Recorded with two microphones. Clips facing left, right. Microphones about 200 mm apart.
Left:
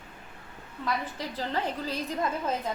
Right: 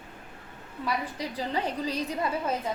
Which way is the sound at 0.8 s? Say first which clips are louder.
Right 1 dB; 10° right (ahead or behind).